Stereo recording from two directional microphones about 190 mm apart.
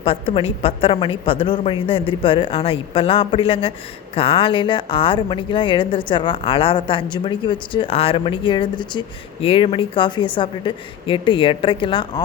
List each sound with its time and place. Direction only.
0.0 s a woman's voice: 30° left (ahead or behind)